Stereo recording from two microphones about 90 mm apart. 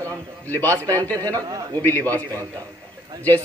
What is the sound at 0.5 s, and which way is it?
Speech, 20° left (ahead or behind).